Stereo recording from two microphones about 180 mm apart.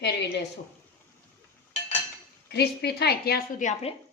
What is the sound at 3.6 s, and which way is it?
Speech, 40° left (ahead or behind).